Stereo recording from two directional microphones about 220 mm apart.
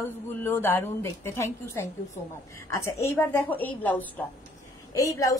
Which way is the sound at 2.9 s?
10° left (ahead or behind).